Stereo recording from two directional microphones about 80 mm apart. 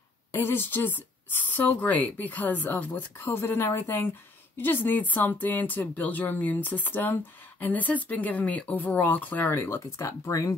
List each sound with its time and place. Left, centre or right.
0.3 s speech: left
9.9 s speech: left